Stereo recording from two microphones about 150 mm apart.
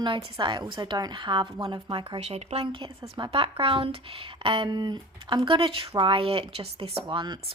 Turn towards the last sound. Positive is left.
turn(degrees=-30)  # may be behind; listen again after turning